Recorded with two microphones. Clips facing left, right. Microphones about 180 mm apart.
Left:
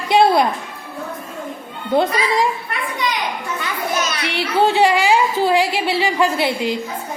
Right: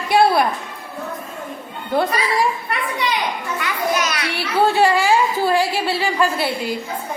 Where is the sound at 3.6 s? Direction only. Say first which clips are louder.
Right 2 dB; 25° left (ahead or behind).